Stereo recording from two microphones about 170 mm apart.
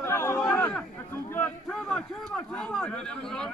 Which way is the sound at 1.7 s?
Centre (ahead or behind).